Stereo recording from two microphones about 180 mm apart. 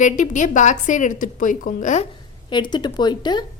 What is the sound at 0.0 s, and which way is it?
A woman's voice, 45° left (ahead or behind).